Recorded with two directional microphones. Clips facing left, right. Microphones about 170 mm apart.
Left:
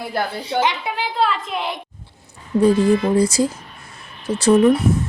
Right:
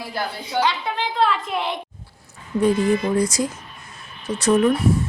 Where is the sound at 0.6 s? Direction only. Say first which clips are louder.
Even; 20° left (ahead or behind).